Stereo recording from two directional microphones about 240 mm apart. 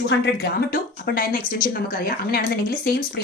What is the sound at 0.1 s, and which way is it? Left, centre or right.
Speech, left.